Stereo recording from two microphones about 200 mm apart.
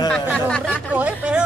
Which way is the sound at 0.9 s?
5° right (ahead or behind).